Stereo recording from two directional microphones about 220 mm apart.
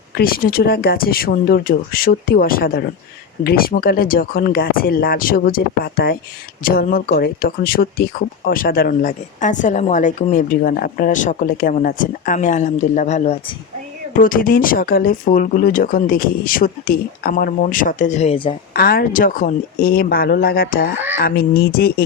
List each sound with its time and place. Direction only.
0.2 s speech: 40° left (ahead or behind); by 18.5 s 25° left (ahead or behind)
18.7 s speech: 45° left (ahead or behind)